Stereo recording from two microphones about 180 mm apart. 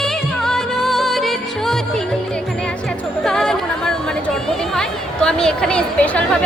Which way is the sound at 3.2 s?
5° left (ahead or behind).